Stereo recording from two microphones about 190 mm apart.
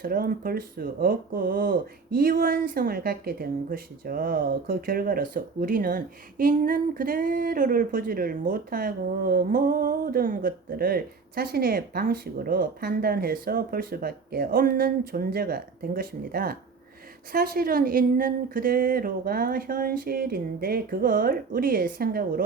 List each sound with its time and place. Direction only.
0.0 s speech: 50° right (ahead or behind)